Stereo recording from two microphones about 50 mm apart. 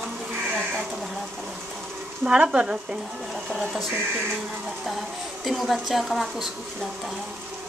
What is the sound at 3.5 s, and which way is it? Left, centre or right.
Speech, centre.